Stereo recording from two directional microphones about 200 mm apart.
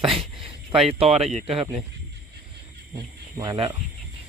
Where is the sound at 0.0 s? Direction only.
25° right (ahead or behind).